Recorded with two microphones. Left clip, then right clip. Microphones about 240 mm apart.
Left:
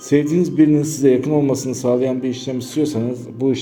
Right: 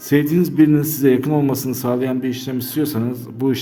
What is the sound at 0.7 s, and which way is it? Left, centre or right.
A man's voice, centre.